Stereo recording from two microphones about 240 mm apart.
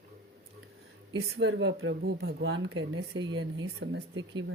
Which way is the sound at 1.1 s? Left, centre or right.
Right.